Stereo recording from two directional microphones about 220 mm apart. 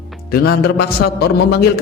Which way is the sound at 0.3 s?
45° left (ahead or behind).